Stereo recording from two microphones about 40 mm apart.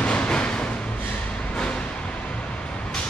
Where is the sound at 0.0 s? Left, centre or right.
Left.